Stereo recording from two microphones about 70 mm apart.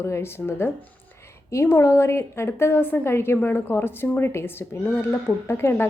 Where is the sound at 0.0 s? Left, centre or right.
Left.